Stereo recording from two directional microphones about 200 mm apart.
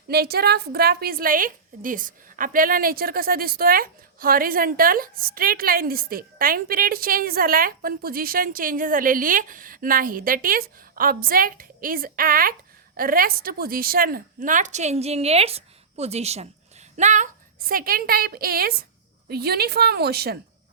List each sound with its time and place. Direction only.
0.1 s a woman's voice: 50° right (ahead or behind)